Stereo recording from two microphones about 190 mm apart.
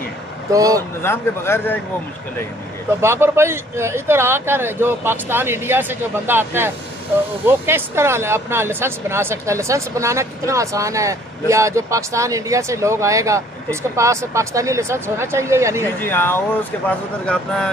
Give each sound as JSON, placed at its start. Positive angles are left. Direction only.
{"t": 0.5, "sound": "speech", "side_deg": -20}
{"t": 1.0, "sound": "speech", "side_deg": 15}
{"t": 3.0, "sound": "speech", "side_deg": -15}
{"t": 16.0, "sound": "speech", "side_deg": 10}